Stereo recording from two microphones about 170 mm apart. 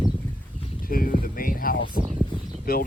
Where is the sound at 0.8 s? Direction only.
60° left (ahead or behind).